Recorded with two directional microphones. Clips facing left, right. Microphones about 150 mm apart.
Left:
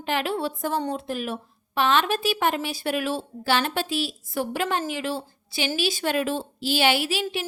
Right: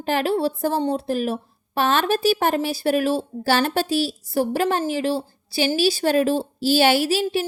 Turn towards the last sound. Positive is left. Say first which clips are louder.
# right 5 dB
turn(degrees=-40)  # may be behind; listen again after turning